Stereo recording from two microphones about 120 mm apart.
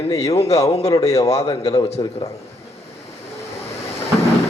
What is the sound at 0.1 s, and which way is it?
Speech, 30° left (ahead or behind).